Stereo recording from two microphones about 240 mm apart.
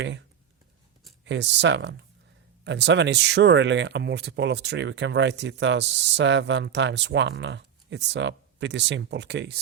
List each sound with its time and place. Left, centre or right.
0.0 s speech: right